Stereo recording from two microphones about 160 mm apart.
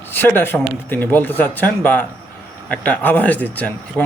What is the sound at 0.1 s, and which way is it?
Speech, 15° left (ahead or behind).